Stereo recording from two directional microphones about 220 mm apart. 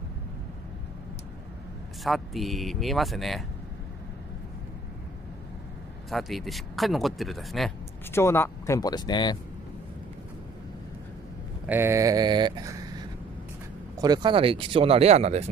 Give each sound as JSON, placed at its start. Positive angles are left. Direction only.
{"t": 2.0, "sound": "speech", "side_deg": 0}
{"t": 6.0, "sound": "speech", "side_deg": 0}
{"t": 8.1, "sound": "speech", "side_deg": 10}
{"t": 11.6, "sound": "speech", "side_deg": -10}